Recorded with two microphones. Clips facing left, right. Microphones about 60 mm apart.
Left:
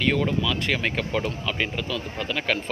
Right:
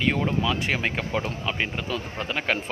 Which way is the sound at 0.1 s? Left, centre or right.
Right.